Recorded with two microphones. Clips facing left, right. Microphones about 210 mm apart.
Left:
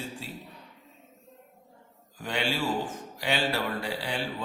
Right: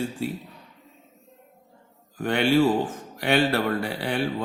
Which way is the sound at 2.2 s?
60° right (ahead or behind).